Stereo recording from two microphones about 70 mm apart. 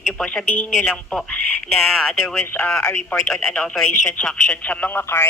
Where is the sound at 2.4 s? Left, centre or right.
Left.